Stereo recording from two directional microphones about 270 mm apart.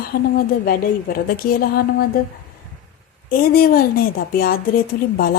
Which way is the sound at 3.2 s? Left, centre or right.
Left.